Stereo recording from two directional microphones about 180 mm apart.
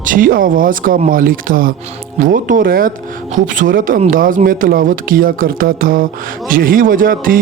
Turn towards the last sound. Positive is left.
turn(degrees=-50)  # may be behind; listen again after turning